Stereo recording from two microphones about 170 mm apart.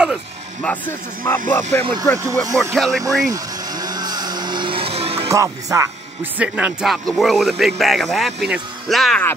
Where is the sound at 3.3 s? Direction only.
25° right (ahead or behind).